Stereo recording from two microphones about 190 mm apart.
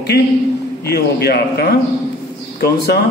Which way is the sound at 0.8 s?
55° left (ahead or behind).